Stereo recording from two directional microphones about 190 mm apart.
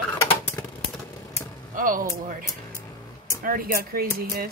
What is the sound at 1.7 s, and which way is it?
Speech, 45° right (ahead or behind).